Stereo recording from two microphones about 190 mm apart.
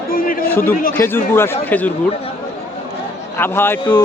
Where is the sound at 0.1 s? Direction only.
50° left (ahead or behind).